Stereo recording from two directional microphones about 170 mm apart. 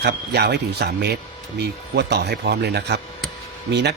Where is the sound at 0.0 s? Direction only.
75° right (ahead or behind).